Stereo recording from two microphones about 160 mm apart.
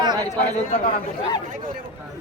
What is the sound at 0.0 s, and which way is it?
Chatter, 25° right (ahead or behind).